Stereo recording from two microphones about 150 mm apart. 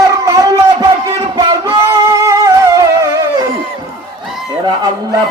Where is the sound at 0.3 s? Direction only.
25° right (ahead or behind).